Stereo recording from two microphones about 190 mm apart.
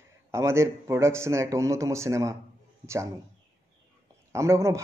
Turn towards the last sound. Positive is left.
turn(degrees=-15)  # may be behind; listen again after turning